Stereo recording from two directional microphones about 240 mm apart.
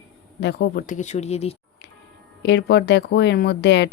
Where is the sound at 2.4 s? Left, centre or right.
Left.